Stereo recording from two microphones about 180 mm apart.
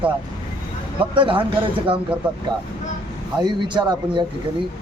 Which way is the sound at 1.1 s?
30° right (ahead or behind).